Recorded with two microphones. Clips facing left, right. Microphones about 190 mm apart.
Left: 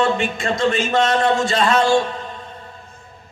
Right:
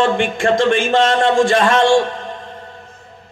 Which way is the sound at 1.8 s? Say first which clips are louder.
Right 3 dB; 85° right.